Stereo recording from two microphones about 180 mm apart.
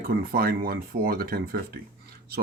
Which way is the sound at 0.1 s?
55° right (ahead or behind).